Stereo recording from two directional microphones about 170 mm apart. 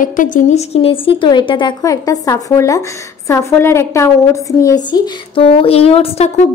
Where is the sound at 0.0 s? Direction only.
50° left (ahead or behind).